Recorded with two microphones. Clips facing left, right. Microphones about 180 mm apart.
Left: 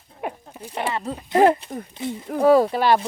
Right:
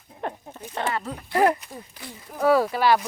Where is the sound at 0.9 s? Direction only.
25° left (ahead or behind).